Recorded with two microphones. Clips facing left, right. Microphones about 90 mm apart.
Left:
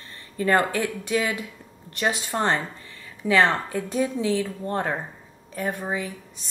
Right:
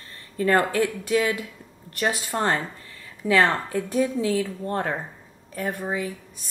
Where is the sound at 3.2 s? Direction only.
10° right (ahead or behind).